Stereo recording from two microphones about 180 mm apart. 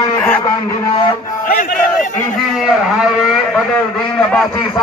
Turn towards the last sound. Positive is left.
turn(degrees=5)  # may be behind; listen again after turning